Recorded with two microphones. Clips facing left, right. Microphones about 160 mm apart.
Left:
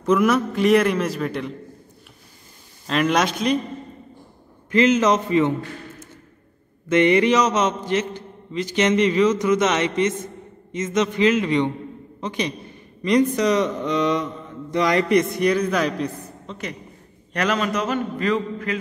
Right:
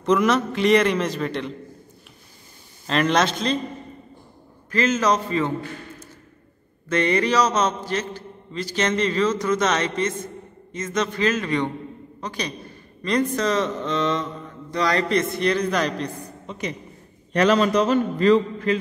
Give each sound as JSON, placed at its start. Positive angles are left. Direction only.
{"t": 0.0, "sound": "a man's voice", "side_deg": 5}
{"t": 2.9, "sound": "speech", "side_deg": 5}
{"t": 4.6, "sound": "a man's voice", "side_deg": 20}
{"t": 6.9, "sound": "a man's voice", "side_deg": 20}
{"t": 16.4, "sound": "a woman's voice", "side_deg": -20}
{"t": 17.3, "sound": "a man's voice", "side_deg": -30}